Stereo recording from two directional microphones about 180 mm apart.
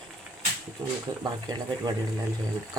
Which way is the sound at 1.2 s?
20° right (ahead or behind).